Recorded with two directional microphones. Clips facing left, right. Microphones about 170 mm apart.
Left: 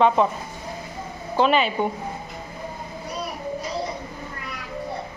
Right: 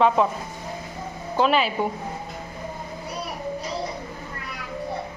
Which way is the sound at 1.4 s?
Centre (ahead or behind).